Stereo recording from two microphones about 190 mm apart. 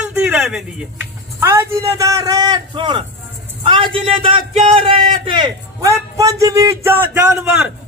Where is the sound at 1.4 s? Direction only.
15° right (ahead or behind).